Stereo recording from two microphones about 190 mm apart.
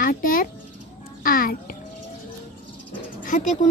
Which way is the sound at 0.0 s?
45° left (ahead or behind).